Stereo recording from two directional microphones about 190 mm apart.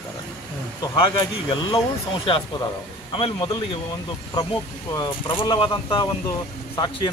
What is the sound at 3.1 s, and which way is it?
Speech, 25° left (ahead or behind).